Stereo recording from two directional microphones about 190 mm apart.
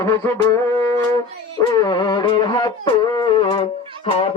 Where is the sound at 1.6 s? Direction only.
20° left (ahead or behind).